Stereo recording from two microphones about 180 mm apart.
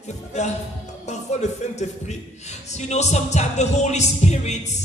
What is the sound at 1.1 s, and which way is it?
A woman's voice, 40° left (ahead or behind).